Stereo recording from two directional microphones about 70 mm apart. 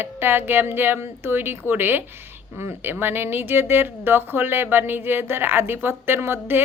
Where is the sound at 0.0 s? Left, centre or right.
Right.